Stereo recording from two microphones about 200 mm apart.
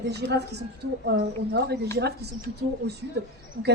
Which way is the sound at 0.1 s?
55° right (ahead or behind).